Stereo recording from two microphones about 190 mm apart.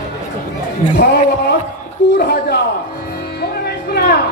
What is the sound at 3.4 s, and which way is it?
Music, 55° left (ahead or behind).